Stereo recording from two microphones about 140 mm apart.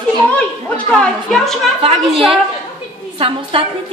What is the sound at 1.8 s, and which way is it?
A woman's voice, 45° right (ahead or behind).